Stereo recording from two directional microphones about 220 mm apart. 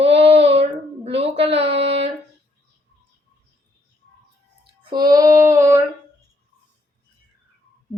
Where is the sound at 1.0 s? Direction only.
25° right (ahead or behind).